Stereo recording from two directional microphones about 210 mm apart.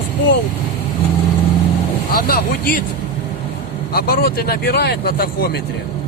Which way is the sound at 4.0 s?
45° left (ahead or behind).